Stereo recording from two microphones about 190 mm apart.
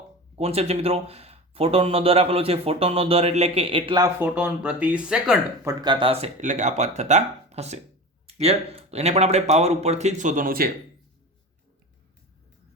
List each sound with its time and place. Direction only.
0.3 s speech: 35° right (ahead or behind)
4.2 s speech: 10° right (ahead or behind)
5.6 s speech: 25° right (ahead or behind); by 10.7 s 50° right (ahead or behind)